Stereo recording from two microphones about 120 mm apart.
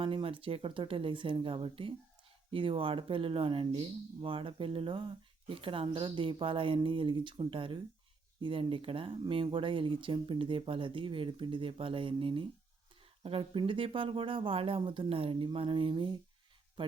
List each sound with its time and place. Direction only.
0.0 s speech: 45° right (ahead or behind)